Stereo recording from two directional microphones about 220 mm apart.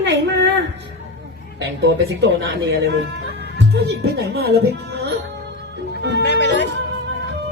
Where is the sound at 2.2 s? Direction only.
50° right (ahead or behind).